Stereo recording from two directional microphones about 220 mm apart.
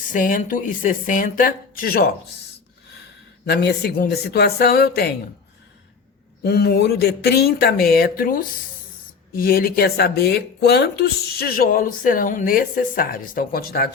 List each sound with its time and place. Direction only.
0.1 s speech: 35° left (ahead or behind)
3.4 s speech: 45° left (ahead or behind)
6.4 s speech: 45° left (ahead or behind)